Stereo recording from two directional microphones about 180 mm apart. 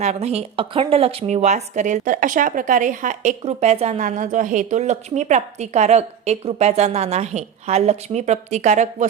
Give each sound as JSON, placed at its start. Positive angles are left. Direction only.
{"t": 0.0, "sound": "speech", "side_deg": -35}